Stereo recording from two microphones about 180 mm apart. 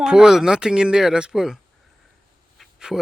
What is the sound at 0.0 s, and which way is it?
Speech, 5° right (ahead or behind).